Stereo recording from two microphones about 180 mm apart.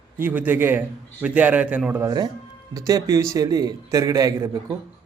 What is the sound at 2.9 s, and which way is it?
A man's voice, 20° right (ahead or behind).